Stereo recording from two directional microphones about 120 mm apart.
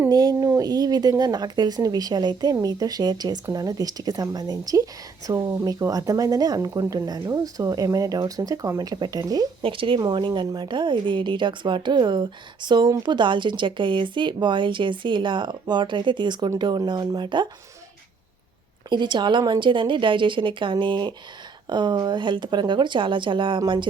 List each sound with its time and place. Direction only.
0.1 s a woman's voice: 35° right (ahead or behind)
9.6 s a woman's voice: 45° right (ahead or behind)
18.9 s a woman's voice: 40° right (ahead or behind)